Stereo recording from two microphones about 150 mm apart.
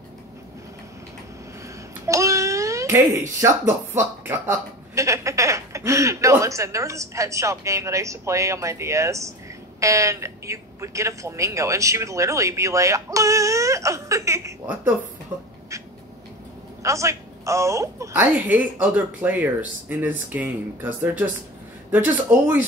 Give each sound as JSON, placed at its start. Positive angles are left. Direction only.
{"t": 2.0, "sound": "babbling", "side_deg": -20}
{"t": 3.9, "sound": "speech", "side_deg": -15}
{"t": 16.8, "sound": "a woman's voice", "side_deg": -20}